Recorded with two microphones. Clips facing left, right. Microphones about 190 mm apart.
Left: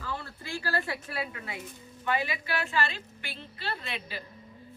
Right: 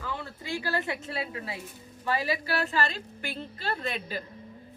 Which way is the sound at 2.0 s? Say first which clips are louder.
Right 2 dB; 35° right (ahead or behind).